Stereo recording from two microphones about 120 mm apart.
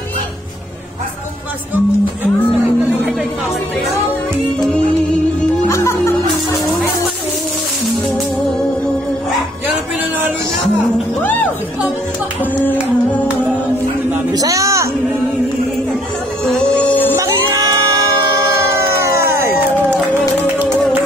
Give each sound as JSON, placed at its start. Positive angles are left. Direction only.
{"t": 5.7, "sound": "music", "side_deg": 25}
{"t": 14.3, "sound": "a sound", "side_deg": -30}
{"t": 16.4, "sound": "music", "side_deg": 10}
{"t": 17.2, "sound": "music", "side_deg": -30}
{"t": 18.5, "sound": "a sound", "side_deg": -20}
{"t": 20.5, "sound": "music", "side_deg": -15}